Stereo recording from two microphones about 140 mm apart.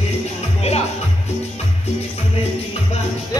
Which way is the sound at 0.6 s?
45° left (ahead or behind).